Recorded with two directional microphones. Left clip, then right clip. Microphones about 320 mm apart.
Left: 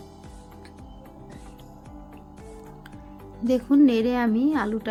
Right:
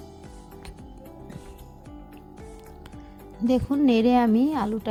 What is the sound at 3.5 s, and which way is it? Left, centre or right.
Speech, right.